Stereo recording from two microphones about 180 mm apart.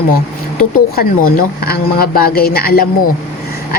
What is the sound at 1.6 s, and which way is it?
Speech, 55° left (ahead or behind).